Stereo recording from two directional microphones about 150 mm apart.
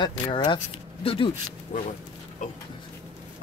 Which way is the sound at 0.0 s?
30° left (ahead or behind).